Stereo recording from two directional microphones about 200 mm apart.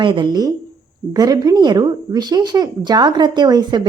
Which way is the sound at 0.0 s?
25° right (ahead or behind).